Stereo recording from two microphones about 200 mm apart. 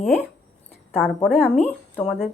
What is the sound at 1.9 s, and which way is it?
Speech, centre (ahead or behind).